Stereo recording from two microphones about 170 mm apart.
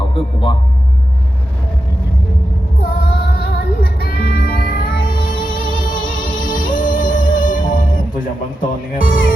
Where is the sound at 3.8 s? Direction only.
65° left (ahead or behind).